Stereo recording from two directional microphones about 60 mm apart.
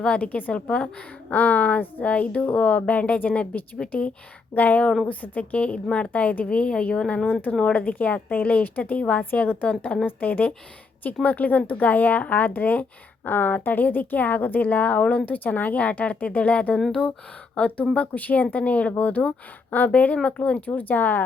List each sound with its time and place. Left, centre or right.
0.0 s a woman's voice: left
10.1 s a woman's voice: left